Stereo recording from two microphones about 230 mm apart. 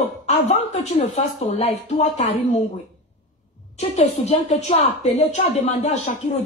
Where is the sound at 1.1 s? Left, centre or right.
Left.